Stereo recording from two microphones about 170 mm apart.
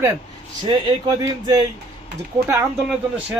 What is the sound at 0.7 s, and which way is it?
Speech, 25° right (ahead or behind).